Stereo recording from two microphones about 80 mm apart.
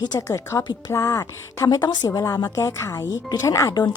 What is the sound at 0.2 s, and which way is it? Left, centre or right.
A woman's voice, left.